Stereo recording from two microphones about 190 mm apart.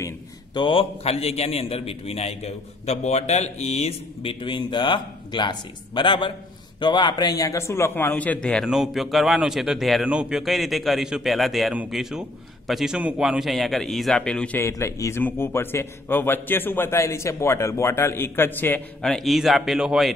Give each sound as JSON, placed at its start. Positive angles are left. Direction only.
{"t": 0.6, "sound": "a man's voice", "side_deg": 30}